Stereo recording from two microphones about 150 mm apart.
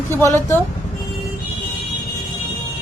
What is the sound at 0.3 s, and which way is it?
Speech, 20° left (ahead or behind).